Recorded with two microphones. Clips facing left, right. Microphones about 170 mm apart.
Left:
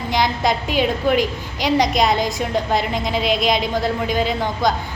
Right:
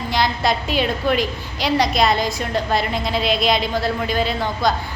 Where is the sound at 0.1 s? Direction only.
15° left (ahead or behind).